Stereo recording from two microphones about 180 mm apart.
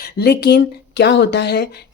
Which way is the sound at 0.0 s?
65° left (ahead or behind).